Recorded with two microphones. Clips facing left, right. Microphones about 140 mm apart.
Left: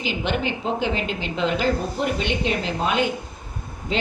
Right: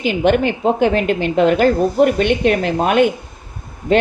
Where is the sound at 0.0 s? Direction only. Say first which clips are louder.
Right 10 dB; 55° right (ahead or behind).